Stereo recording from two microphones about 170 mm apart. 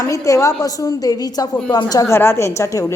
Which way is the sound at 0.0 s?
20° left (ahead or behind).